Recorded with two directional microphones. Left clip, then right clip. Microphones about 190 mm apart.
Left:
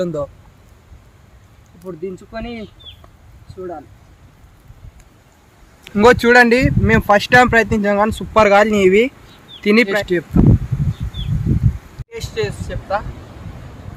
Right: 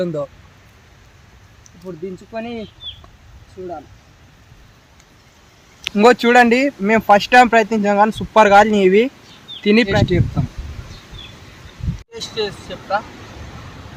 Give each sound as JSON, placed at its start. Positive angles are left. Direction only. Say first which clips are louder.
{"t": 0.0, "sound": "speech", "louder": "left 1 dB", "side_deg": 0}
{"t": 2.3, "sound": "speech", "louder": "right 1 dB", "side_deg": 0}
{"t": 5.9, "sound": "speech", "louder": "left 1 dB", "side_deg": -15}
{"t": 12.2, "sound": "speech", "louder": "even", "side_deg": 5}